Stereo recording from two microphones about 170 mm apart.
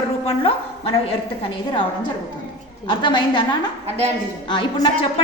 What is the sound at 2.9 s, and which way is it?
Speech, 25° left (ahead or behind).